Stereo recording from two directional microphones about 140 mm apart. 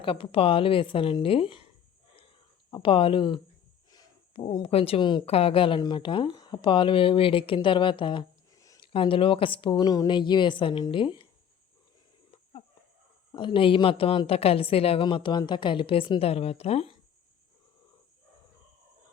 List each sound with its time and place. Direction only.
0.0 s a woman's voice: 40° left (ahead or behind)
2.6 s a woman's voice: 35° left (ahead or behind)
8.5 s a sound: 25° left (ahead or behind)
8.9 s a woman's voice: 40° left (ahead or behind)
13.3 s a woman's voice: 35° left (ahead or behind)